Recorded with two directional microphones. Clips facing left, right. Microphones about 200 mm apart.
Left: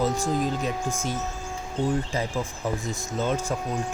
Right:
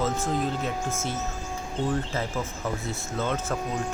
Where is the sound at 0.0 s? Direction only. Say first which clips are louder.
Left 2 dB; 15° left (ahead or behind).